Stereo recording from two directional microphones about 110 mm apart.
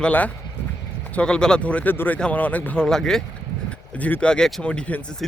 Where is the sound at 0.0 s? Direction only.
15° left (ahead or behind).